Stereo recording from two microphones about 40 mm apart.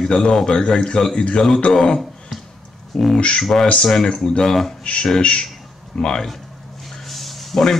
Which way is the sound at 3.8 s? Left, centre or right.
Centre.